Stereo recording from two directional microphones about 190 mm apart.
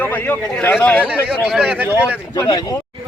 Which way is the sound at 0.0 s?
10° left (ahead or behind).